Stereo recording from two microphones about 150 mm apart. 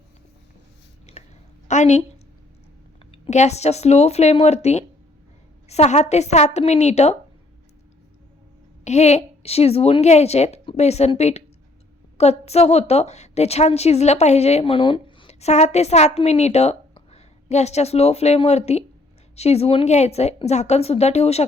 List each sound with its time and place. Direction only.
1.1 s chewing: 50° left (ahead or behind)
1.6 s a sound: 50° left (ahead or behind)
3.1 s a woman's voice: 50° left (ahead or behind)
8.8 s a woman's voice: 50° left (ahead or behind)